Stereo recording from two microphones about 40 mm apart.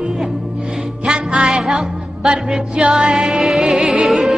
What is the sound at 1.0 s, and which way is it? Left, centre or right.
Music, right.